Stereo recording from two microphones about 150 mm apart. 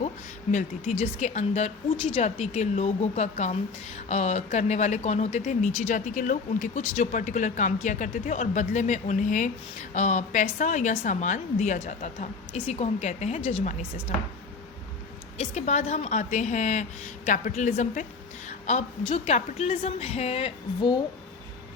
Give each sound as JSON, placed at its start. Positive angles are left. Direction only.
{"t": 0.5, "sound": "speech", "side_deg": 55}
{"t": 12.5, "sound": "speech", "side_deg": 40}
{"t": 15.4, "sound": "a woman's voice", "side_deg": 50}